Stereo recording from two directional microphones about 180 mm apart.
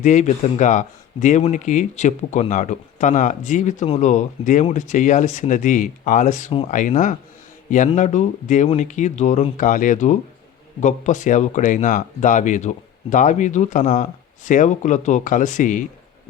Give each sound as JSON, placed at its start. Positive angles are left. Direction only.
{"t": 0.0, "sound": "speech", "side_deg": 40}